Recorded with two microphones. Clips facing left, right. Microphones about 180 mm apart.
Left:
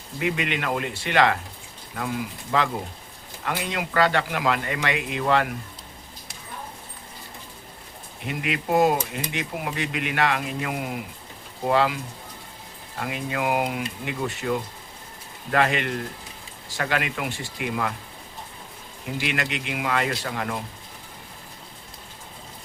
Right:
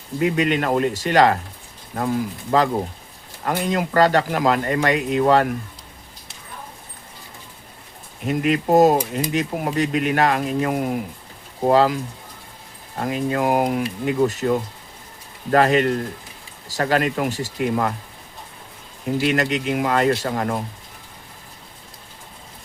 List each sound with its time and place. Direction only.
0.2 s speech: 40° right (ahead or behind)
8.3 s speech: 40° right (ahead or behind)
13.0 s speech: 40° right (ahead or behind)
15.5 s speech: 40° right (ahead or behind)
19.1 s speech: 40° right (ahead or behind)